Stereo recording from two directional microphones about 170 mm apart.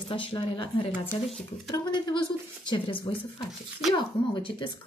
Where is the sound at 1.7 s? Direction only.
25° left (ahead or behind).